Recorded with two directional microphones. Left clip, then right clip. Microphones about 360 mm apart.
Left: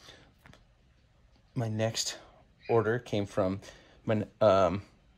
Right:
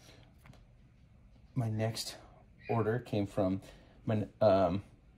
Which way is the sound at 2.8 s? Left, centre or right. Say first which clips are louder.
Left 3 dB; centre.